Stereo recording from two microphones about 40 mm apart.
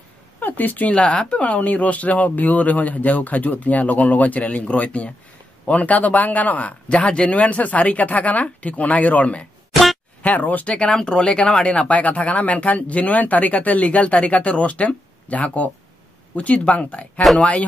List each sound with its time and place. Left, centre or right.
0.4 s speech: left
0.8 s speech: left
1.3 s speech: left
10.8 s speech: left